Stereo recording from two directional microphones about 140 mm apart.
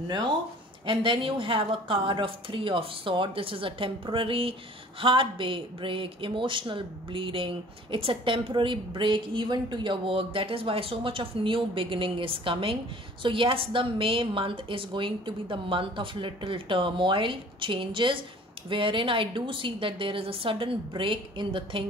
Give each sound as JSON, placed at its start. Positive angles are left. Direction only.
{"t": 0.8, "sound": "speech", "side_deg": -40}